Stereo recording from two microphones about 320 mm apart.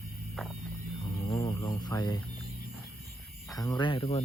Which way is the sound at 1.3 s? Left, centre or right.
Centre.